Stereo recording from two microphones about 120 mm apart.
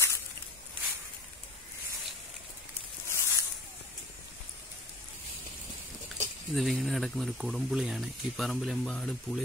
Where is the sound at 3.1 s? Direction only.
20° left (ahead or behind).